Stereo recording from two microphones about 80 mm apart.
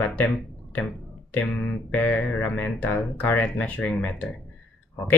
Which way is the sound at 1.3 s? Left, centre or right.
Centre.